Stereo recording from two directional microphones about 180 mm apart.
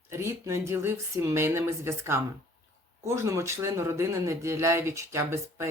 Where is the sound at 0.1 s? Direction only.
15° right (ahead or behind).